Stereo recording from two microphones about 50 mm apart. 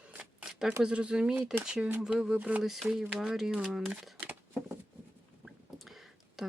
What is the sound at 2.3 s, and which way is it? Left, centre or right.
Speech, right.